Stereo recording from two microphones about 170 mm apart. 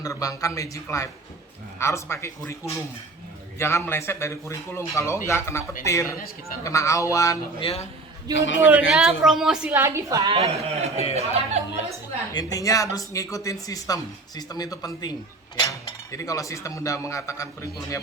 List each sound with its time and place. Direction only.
0.0 s speech: 20° left (ahead or behind)
3.6 s speech: 15° left (ahead or behind)
6.1 s a man's voice: 55° left (ahead or behind)
6.7 s speech: 20° left (ahead or behind)
7.6 s a man's voice: 35° left (ahead or behind)
8.5 s a woman's voice: 5° right (ahead or behind); by 11.9 s 40° right (ahead or behind)
12.3 s speech: 20° left (ahead or behind)
16.1 s speech: 20° left (ahead or behind)